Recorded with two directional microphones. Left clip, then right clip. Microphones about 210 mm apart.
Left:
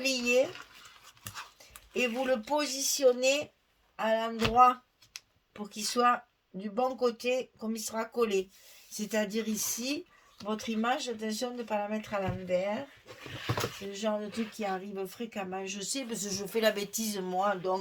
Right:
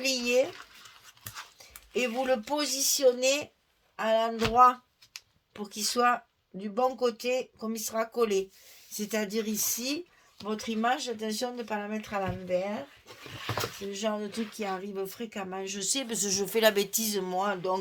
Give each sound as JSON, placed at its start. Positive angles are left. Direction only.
{"t": 0.0, "sound": "a sound", "side_deg": -35}
{"t": 1.5, "sound": "speech", "side_deg": -35}
{"t": 13.9, "sound": "speech", "side_deg": -40}